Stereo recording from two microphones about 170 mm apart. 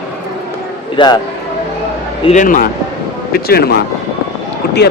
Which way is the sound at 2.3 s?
50° left (ahead or behind).